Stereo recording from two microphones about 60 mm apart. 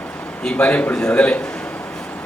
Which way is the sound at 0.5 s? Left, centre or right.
Left.